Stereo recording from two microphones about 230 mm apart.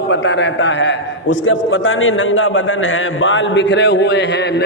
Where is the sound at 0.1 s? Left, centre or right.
Left.